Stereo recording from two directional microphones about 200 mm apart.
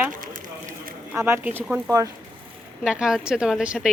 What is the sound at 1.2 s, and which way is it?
Speech, 10° right (ahead or behind).